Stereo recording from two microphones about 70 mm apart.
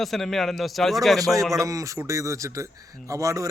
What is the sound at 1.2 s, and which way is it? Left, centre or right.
A man's voice, right.